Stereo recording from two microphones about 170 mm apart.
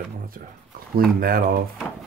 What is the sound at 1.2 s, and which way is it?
Speech, 60° right (ahead or behind).